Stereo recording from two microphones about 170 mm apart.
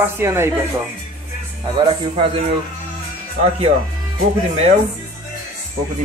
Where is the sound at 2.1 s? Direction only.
35° right (ahead or behind).